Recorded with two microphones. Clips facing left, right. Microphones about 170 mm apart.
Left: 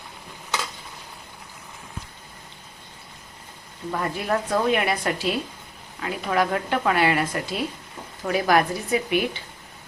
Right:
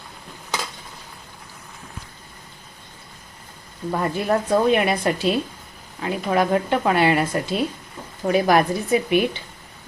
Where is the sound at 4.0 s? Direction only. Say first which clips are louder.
Right 4 dB; 25° right (ahead or behind).